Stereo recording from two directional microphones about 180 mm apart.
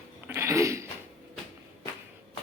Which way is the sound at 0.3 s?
15° right (ahead or behind).